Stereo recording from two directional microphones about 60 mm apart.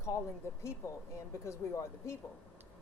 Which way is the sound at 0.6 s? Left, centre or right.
Left.